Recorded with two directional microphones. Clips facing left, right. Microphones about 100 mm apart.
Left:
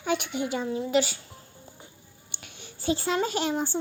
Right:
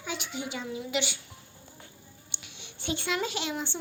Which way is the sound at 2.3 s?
50° left (ahead or behind).